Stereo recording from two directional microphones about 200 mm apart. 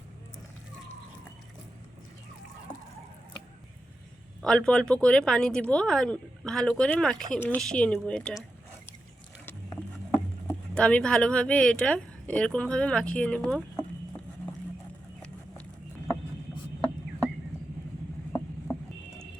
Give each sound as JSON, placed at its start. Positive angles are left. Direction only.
{"t": 4.4, "sound": "speech", "side_deg": 5}
{"t": 9.5, "sound": "speech", "side_deg": 10}